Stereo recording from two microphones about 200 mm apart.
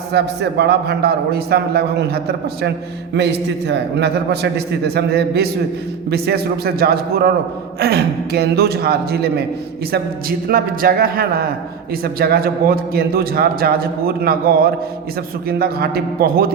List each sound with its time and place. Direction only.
0.1 s a man's voice: 55° right (ahead or behind)